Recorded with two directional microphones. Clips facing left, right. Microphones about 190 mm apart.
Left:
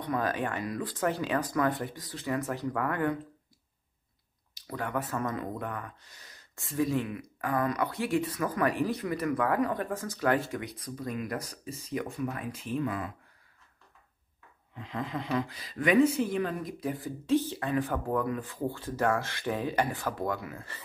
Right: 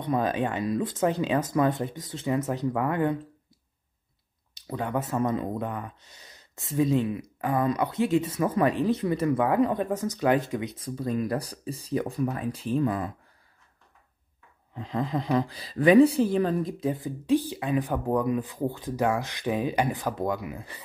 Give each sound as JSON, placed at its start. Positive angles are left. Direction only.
{"t": 0.0, "sound": "speech", "side_deg": -20}
{"t": 4.6, "sound": "speech", "side_deg": -25}
{"t": 14.7, "sound": "speech", "side_deg": -35}